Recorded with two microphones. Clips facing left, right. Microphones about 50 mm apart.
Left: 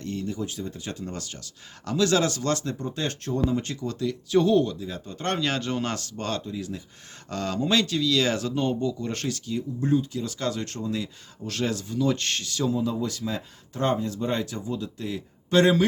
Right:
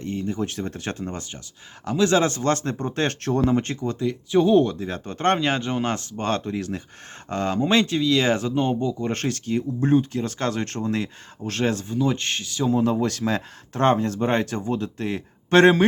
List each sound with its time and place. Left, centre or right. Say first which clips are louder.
0.0 s a sound: right 3 dB; right
0.3 s speech: right 4 dB; right
1.0 s speech: right 3 dB; right
4.5 s speech: right 4 dB; right
6.3 s speech: right 5 dB; right
7.3 s speech: right 4 dB; right
12.7 s speech: right 6 dB; right